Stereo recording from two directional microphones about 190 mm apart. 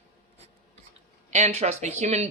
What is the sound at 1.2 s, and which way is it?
A woman's voice, 40° right (ahead or behind).